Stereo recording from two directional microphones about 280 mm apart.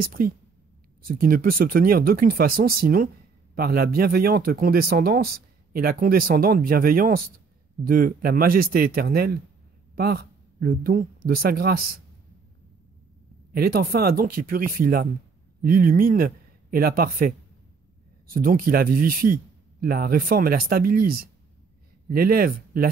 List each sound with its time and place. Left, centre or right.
0.0 s speech: right
13.5 s speech: right